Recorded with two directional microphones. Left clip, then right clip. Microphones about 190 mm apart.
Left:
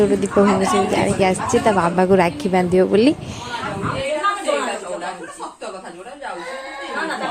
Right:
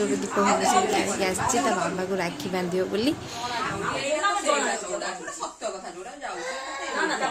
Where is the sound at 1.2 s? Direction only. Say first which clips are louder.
Left 7 dB; 40° left (ahead or behind).